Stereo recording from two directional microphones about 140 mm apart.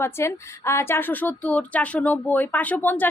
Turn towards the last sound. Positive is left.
turn(degrees=10)  # may be behind; listen again after turning